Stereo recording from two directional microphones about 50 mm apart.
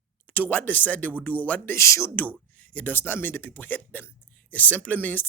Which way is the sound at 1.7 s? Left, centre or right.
Left.